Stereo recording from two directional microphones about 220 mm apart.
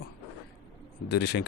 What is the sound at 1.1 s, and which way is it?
Speech, 50° left (ahead or behind).